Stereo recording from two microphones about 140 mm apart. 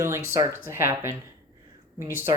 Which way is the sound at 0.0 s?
20° right (ahead or behind).